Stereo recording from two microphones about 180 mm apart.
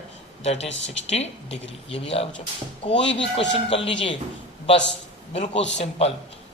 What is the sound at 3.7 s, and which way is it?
Speech, 30° left (ahead or behind).